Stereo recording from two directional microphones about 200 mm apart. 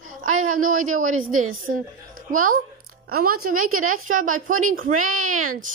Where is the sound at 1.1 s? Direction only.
90° right.